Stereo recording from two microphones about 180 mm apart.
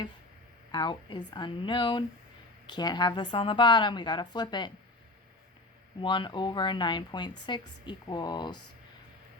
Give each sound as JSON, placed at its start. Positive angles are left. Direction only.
{"t": 0.7, "sound": "speech", "side_deg": 25}
{"t": 6.0, "sound": "speech", "side_deg": 25}